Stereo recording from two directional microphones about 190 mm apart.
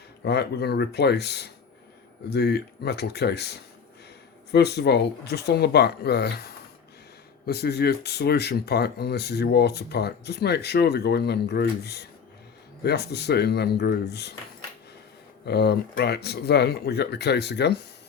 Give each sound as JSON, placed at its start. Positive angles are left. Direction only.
{"t": 0.3, "sound": "speech", "side_deg": 60}
{"t": 15.4, "sound": "speech", "side_deg": 60}